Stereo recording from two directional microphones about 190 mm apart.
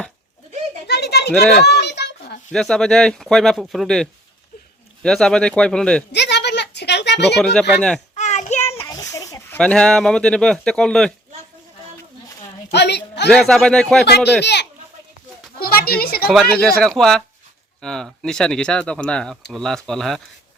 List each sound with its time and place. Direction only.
0.9 s a sound: 60° left (ahead or behind)
2.5 s speech: 5° left (ahead or behind)
6.1 s a sound: 65° left (ahead or behind)
7.3 s speech: centre (ahead or behind)
8.1 s child singing: 40° left (ahead or behind)
8.9 s a sound: 15° left (ahead or behind)
9.6 s speech: 5° left (ahead or behind)
12.7 s a woman's voice: 60° left (ahead or behind)
13.3 s speech: 5° left (ahead or behind)
14.4 s speech: 60° left (ahead or behind)
15.5 s a sound: 55° left (ahead or behind)
16.6 s speech: 5° left (ahead or behind)